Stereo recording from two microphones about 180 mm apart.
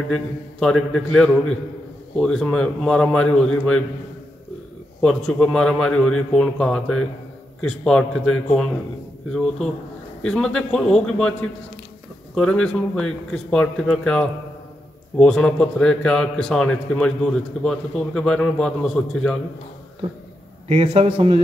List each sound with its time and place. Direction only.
0.1 s a man's voice: 5° left (ahead or behind)
5.0 s a man's voice: 5° left (ahead or behind)
10.2 s a man's voice: 5° left (ahead or behind)
12.4 s a man's voice: 5° left (ahead or behind)
20.6 s a man's voice: 35° right (ahead or behind)